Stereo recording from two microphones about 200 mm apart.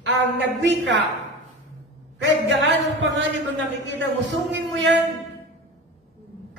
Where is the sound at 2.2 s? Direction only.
65° right (ahead or behind).